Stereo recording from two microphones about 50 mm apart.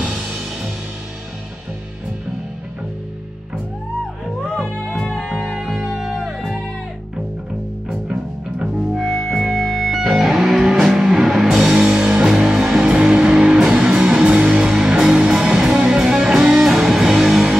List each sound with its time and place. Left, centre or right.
0.0 s music: centre
4.8 s music: left
5.1 s music: centre
8.1 s music: right
8.9 s music: centre